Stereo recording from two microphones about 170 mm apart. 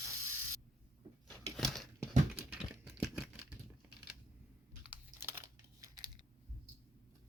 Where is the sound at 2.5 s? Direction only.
5° right (ahead or behind).